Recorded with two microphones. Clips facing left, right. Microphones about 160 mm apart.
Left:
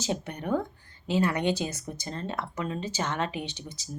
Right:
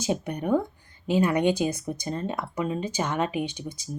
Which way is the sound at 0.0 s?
15° right (ahead or behind).